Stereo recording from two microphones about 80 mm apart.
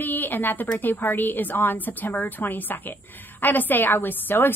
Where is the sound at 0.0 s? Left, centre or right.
Left.